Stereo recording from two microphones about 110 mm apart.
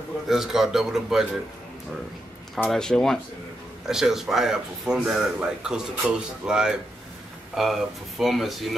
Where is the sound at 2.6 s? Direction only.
5° left (ahead or behind).